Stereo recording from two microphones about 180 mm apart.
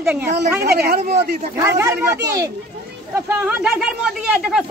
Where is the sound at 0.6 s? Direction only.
60° right (ahead or behind).